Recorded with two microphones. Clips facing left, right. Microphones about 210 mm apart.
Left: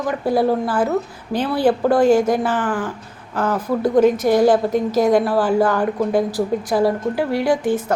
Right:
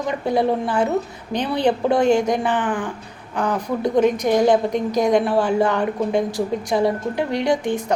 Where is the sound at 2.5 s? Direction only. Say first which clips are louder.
Left 1 dB; 20° right (ahead or behind).